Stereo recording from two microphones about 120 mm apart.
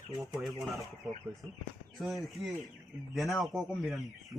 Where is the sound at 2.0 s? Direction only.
Centre (ahead or behind).